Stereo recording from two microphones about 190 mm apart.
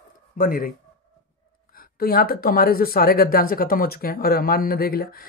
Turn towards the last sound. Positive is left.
turn(degrees=50)  # may be behind; listen again after turning